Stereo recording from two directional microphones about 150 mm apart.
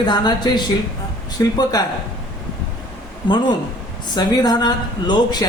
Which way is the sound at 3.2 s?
30° left (ahead or behind).